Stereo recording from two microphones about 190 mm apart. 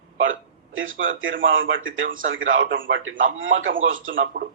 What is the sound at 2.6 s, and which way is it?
Speech, 50° right (ahead or behind).